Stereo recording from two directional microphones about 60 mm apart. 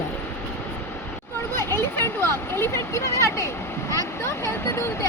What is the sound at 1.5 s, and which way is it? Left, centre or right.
Speech, left.